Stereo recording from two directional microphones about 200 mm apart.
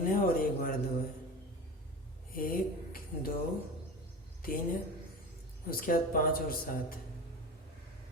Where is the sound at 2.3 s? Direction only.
45° left (ahead or behind).